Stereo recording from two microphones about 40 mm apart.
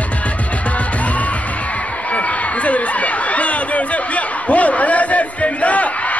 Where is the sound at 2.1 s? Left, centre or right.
Left.